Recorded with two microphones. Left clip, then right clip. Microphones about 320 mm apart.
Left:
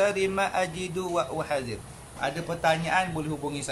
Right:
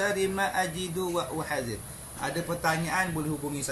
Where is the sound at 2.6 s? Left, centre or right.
Left.